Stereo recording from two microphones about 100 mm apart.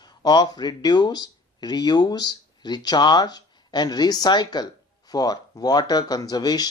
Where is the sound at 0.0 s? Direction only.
45° left (ahead or behind).